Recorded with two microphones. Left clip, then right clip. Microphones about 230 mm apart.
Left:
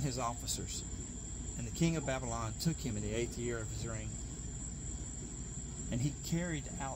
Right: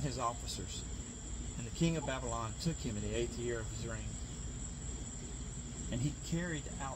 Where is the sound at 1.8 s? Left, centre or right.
Left.